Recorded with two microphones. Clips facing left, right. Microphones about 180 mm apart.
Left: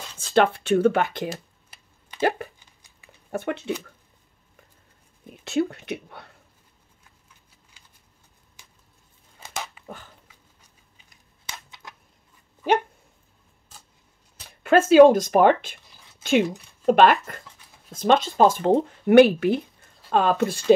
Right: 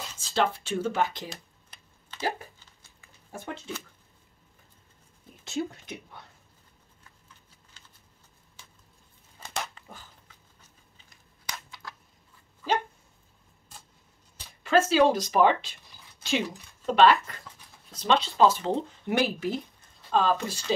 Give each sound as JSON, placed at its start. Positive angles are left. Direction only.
{"t": 0.2, "sound": "speech", "side_deg": 60}
{"t": 1.3, "sound": "a sound", "side_deg": 5}
{"t": 2.1, "sound": "speech", "side_deg": 65}
{"t": 5.4, "sound": "speech", "side_deg": 65}
{"t": 7.8, "sound": "shuffling cards", "side_deg": 15}
{"t": 11.5, "sound": "a sound", "side_deg": 20}
{"t": 14.6, "sound": "speech", "side_deg": 55}